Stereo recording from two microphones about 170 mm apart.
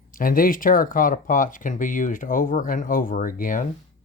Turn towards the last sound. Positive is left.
turn(degrees=50)  # may be behind; listen again after turning